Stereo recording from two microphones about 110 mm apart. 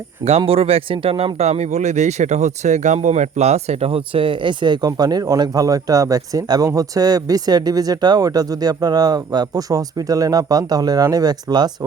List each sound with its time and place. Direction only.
0.3 s speech: 65° right (ahead or behind); by 11.9 s 35° right (ahead or behind)